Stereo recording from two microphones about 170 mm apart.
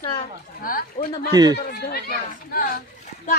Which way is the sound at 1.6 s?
65° left (ahead or behind).